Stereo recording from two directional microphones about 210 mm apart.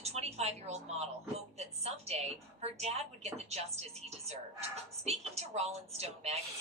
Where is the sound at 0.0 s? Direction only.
30° right (ahead or behind).